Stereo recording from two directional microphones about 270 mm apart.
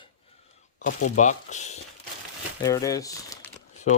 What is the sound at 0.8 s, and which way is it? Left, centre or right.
Speech, left.